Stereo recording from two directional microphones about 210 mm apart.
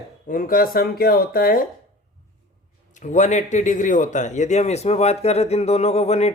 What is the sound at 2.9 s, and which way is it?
Speech, 35° left (ahead or behind).